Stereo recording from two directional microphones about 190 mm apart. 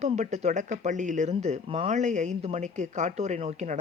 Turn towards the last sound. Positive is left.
turn(degrees=-35)  # may be behind; listen again after turning